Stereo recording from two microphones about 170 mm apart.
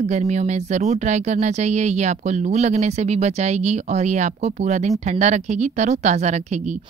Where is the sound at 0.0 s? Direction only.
40° right (ahead or behind).